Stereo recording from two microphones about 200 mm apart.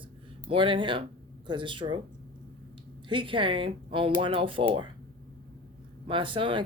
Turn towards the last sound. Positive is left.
turn(degrees=-25)  # may be behind; listen again after turning